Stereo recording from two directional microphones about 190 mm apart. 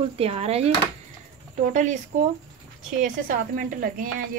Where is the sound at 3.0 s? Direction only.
45° right (ahead or behind).